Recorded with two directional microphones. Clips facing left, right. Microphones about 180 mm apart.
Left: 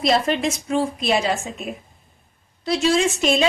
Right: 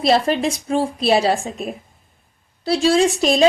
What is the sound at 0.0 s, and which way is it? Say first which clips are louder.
A woman's voice: right 3 dB; 30° right (ahead or behind).